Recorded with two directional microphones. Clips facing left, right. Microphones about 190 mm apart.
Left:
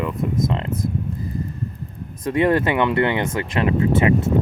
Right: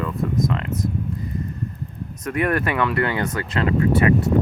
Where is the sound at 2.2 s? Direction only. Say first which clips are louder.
Left 4 dB; 25° left (ahead or behind).